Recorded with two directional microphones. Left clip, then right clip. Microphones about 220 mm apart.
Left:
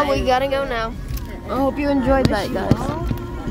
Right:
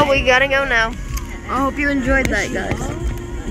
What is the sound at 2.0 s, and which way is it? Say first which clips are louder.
Speech: left 1 dB; 35° left (ahead or behind).